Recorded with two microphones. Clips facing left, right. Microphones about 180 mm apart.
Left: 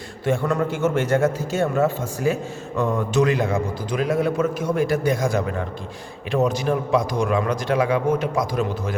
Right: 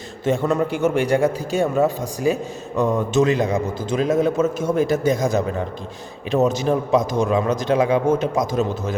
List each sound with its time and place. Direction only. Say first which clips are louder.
0.3 s a man's voice: right 2 dB; 20° right (ahead or behind)